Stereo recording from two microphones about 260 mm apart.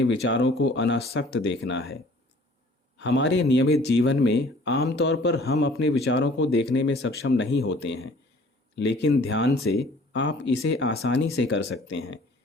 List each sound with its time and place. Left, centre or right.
0.0 s speech: left
3.0 s speech: left